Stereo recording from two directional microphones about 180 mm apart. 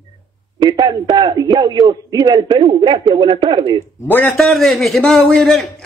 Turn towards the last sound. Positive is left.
turn(degrees=0)  # may be behind; listen again after turning